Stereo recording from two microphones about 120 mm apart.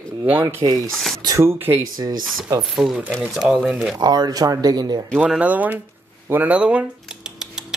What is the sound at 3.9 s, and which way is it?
Speech, 35° right (ahead or behind).